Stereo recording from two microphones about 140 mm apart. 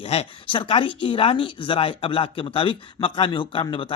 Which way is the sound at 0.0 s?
45° left (ahead or behind).